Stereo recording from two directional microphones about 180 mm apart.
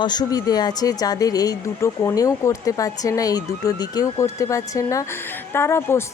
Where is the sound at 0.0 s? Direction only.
25° left (ahead or behind).